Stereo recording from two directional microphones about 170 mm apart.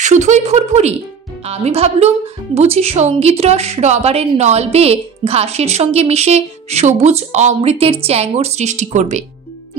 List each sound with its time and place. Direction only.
0.0 s speech: 45° right (ahead or behind)